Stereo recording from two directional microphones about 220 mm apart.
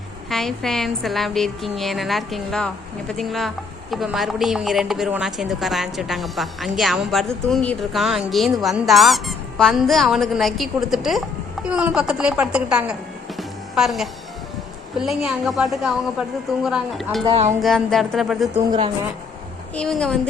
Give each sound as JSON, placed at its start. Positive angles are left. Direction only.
{"t": 0.3, "sound": "a woman's voice", "side_deg": 0}
{"t": 17.2, "sound": "speech", "side_deg": -25}
{"t": 17.6, "sound": "a woman's voice", "side_deg": 0}
{"t": 19.7, "sound": "a woman's voice", "side_deg": 5}